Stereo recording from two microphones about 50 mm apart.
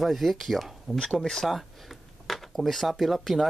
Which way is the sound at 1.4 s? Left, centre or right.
Centre.